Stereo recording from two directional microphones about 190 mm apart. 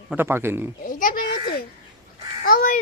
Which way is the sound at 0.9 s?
45° left (ahead or behind).